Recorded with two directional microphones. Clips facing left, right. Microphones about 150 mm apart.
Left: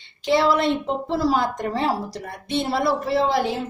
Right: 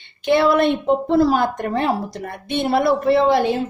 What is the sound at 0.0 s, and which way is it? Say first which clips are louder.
A woman's voice: right 3 dB; 60° right (ahead or behind).